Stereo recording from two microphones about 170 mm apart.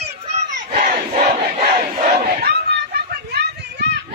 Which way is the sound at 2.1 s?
65° right (ahead or behind).